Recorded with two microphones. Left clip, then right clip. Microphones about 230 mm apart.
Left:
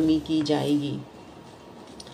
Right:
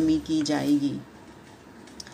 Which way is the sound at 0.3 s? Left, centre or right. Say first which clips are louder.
Left 2 dB; right.